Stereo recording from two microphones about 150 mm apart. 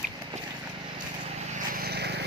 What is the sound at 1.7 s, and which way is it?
Vehicle, 90° right.